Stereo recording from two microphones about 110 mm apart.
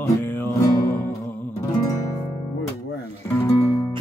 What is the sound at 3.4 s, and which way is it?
Music, 30° left (ahead or behind).